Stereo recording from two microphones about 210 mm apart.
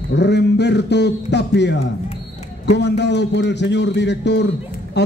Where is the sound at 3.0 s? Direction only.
55° left (ahead or behind).